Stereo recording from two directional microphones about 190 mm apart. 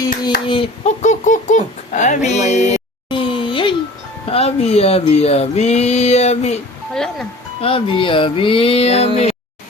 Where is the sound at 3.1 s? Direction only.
25° left (ahead or behind).